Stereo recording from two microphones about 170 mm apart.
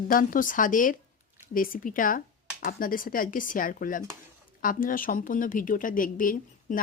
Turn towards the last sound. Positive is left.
turn(degrees=55)  # may be behind; listen again after turning